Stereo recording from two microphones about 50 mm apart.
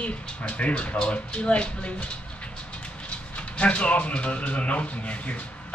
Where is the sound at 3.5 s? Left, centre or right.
Left.